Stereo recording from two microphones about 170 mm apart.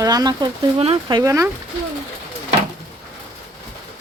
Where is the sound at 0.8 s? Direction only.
35° right (ahead or behind).